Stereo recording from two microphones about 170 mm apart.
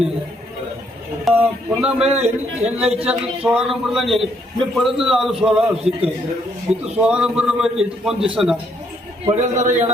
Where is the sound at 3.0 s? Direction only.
5° right (ahead or behind).